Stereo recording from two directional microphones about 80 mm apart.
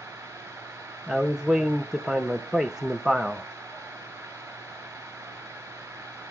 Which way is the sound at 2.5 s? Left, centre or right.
Right.